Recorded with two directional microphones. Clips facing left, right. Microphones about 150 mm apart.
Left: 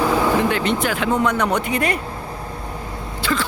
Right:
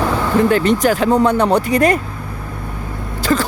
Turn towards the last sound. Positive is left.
turn(degrees=-40)  # may be behind; listen again after turning